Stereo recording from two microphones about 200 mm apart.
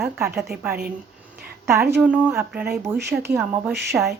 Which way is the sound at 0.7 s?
50° right (ahead or behind).